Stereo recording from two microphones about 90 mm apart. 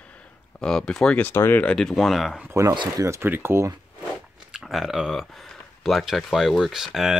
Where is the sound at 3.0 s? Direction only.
30° right (ahead or behind).